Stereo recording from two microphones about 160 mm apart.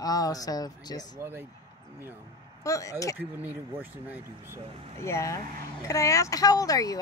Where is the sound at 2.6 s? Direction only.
20° left (ahead or behind).